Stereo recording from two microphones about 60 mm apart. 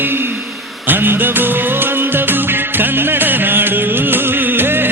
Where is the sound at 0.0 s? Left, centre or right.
Right.